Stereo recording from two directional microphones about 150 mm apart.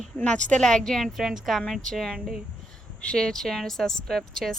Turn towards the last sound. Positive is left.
turn(degrees=0)  # may be behind; listen again after turning